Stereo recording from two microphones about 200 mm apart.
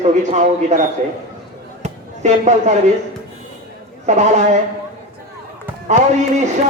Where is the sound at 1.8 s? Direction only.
35° right (ahead or behind).